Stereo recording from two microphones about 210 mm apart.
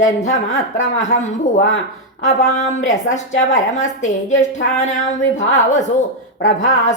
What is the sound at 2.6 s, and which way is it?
A woman's voice, 35° left (ahead or behind).